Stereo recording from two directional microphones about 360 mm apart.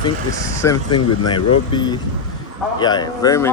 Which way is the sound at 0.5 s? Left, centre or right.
Centre.